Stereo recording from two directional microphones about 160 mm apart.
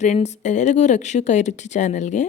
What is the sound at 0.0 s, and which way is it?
Speech, 45° left (ahead or behind).